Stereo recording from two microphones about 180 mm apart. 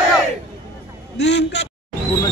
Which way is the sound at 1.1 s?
70° left (ahead or behind).